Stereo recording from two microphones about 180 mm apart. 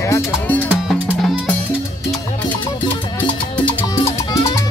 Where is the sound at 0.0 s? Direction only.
15° left (ahead or behind).